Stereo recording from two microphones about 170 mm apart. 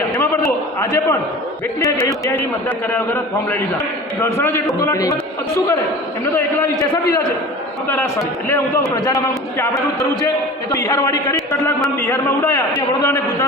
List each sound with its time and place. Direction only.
0.1 s a sound: 15° left (ahead or behind)
2.3 s a man's voice: 10° left (ahead or behind)
6.3 s a man's voice: 10° left (ahead or behind)